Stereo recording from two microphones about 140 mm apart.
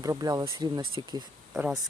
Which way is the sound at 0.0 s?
25° right (ahead or behind).